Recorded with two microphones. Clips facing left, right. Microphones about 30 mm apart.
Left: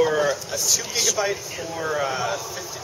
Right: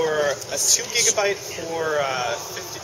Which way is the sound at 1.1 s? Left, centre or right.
Centre.